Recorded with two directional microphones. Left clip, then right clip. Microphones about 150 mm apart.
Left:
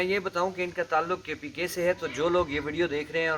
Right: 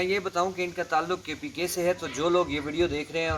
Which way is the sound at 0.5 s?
5° left (ahead or behind).